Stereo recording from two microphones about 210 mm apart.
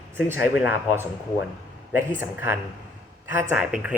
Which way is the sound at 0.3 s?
10° right (ahead or behind).